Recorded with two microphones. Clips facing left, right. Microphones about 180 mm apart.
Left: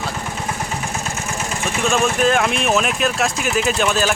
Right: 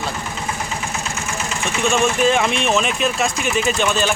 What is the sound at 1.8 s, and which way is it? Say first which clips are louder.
Speech: right 1 dB; centre (ahead or behind).